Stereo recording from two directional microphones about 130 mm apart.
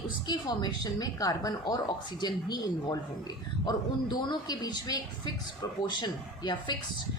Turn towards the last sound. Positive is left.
turn(degrees=35)  # may be behind; listen again after turning